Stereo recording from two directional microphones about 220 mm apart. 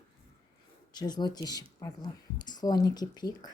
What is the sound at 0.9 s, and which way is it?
Speech, 20° left (ahead or behind).